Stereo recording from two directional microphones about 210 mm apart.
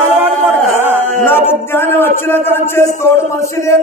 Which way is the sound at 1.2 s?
10° left (ahead or behind).